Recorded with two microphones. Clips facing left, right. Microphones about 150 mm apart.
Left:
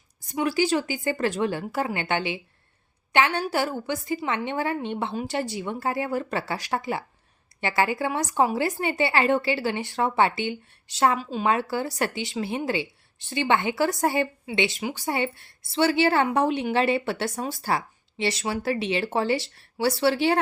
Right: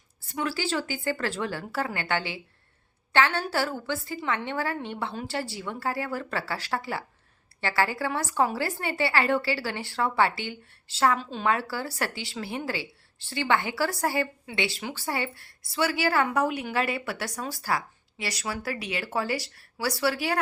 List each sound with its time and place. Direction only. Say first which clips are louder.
0.2 s a woman's voice: left 6 dB; 15° left (ahead or behind)